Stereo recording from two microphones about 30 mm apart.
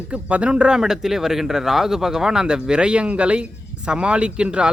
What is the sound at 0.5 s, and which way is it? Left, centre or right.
Speech, right.